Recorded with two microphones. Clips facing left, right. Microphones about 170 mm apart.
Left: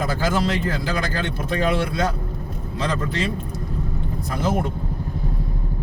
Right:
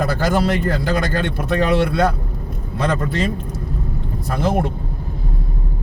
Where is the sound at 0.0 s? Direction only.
55° right (ahead or behind).